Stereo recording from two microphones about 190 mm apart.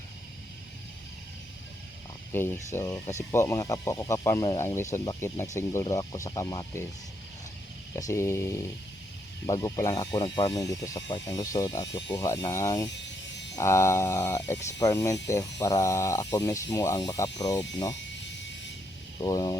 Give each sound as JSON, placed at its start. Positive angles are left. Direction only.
{"t": 2.3, "sound": "speech", "side_deg": 10}
{"t": 7.9, "sound": "speech", "side_deg": 15}
{"t": 12.9, "sound": "a sound", "side_deg": 65}
{"t": 13.6, "sound": "speech", "side_deg": 15}
{"t": 19.2, "sound": "speech", "side_deg": 20}